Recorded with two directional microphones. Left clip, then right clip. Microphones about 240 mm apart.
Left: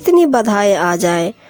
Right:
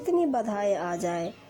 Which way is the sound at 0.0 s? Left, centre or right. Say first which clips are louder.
Left 14 dB; left.